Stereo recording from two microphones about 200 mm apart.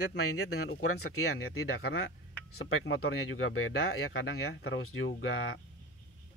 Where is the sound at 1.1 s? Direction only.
90° left.